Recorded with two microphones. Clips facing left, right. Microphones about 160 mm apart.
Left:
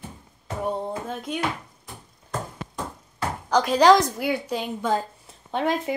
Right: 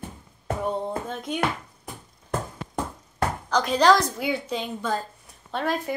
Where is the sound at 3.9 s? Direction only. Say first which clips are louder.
Left 3 dB; 15° left (ahead or behind).